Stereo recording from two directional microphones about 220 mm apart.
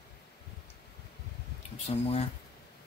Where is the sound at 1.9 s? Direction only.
30° left (ahead or behind).